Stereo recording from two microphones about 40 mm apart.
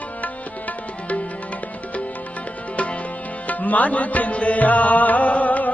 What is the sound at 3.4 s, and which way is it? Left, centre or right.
Music, left.